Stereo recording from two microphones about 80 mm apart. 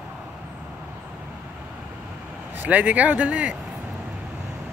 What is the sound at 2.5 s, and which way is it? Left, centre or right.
Speech, centre.